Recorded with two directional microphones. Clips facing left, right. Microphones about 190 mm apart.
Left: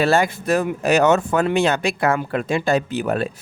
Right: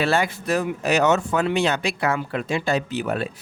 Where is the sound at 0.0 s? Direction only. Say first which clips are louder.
Left 4 dB; 45° left (ahead or behind).